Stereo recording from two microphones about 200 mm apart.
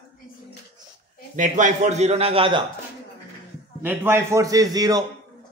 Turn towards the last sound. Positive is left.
turn(degrees=-20)  # may be behind; listen again after turning